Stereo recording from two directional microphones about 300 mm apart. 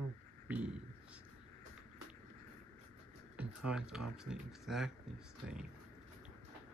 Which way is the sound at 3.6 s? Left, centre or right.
Centre.